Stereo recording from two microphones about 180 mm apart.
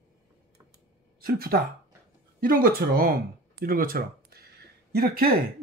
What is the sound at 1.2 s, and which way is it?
Speech, 55° right (ahead or behind).